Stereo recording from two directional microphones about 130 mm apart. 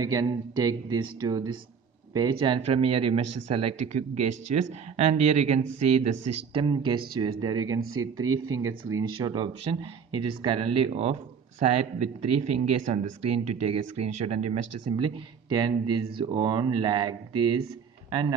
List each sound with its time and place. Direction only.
0.0 s speech: 30° right (ahead or behind); by 3.9 s 45° right (ahead or behind)
3.9 s speech: 60° right (ahead or behind)
6.6 s speech: 35° right (ahead or behind)
9.0 s speech: 35° right (ahead or behind)